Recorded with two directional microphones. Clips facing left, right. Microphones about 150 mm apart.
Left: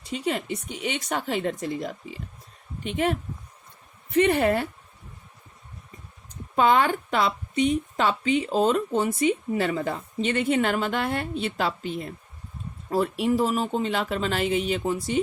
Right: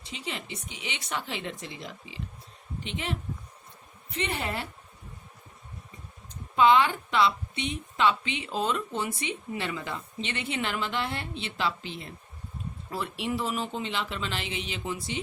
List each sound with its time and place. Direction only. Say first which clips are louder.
0.0 s a woman's voice: left 10 dB; 50° left (ahead or behind)
6.6 s a woman's voice: left 1 dB; 45° left (ahead or behind)